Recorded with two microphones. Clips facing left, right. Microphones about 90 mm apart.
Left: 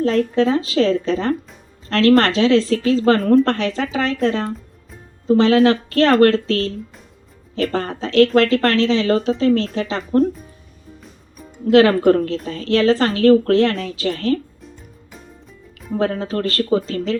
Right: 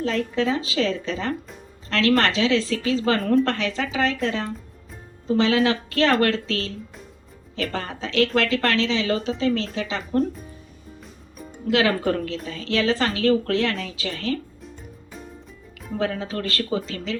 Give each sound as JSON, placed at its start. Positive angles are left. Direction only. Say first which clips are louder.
{"t": 0.0, "sound": "a woman's voice", "louder": "left 7 dB", "side_deg": 45}
{"t": 11.6, "sound": "a woman's voice", "louder": "left 9 dB", "side_deg": 45}
{"t": 16.0, "sound": "speech", "louder": "left 6 dB", "side_deg": 40}